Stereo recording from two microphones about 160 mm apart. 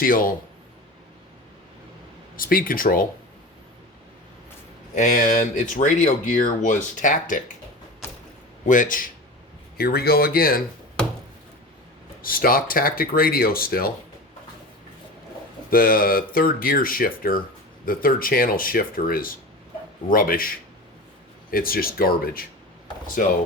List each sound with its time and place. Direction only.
0.0 s speech: 65° left (ahead or behind)
2.3 s speech: 65° left (ahead or behind)
4.9 s speech: 55° left (ahead or behind)
8.6 s speech: 55° left (ahead or behind)
9.7 s speech: 75° left (ahead or behind)
12.2 s speech: 65° left (ahead or behind)
15.7 s speech: 65° left (ahead or behind)